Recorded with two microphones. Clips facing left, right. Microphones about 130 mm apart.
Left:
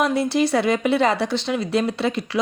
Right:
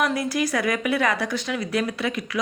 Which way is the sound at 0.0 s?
25° left (ahead or behind).